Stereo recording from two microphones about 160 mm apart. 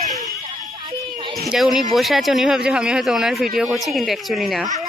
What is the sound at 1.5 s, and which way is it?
Speech, centre (ahead or behind).